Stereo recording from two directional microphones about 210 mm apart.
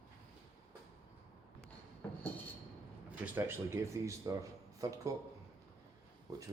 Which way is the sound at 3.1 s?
10° right (ahead or behind).